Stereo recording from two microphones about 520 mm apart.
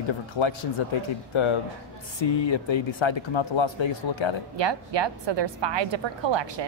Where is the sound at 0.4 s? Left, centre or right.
Left.